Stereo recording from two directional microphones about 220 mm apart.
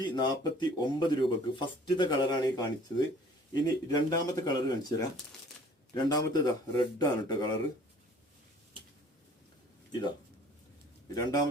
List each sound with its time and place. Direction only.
0.0 s speech: 20° left (ahead or behind)
11.1 s speech: 15° left (ahead or behind)